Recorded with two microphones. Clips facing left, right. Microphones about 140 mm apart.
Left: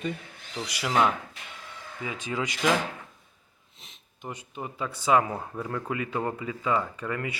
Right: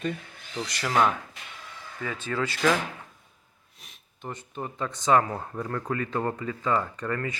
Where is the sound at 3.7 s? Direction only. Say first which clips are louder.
Even; 25° left (ahead or behind).